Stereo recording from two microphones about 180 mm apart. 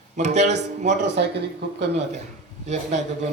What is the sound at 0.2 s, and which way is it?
Music, 40° right (ahead or behind).